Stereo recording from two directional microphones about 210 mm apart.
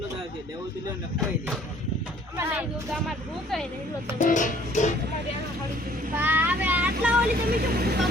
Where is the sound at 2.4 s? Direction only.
5° right (ahead or behind).